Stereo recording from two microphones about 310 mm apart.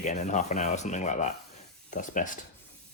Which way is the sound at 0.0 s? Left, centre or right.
Left.